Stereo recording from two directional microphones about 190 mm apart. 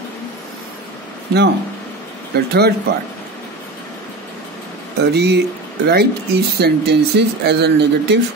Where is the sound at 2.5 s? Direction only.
55° right (ahead or behind).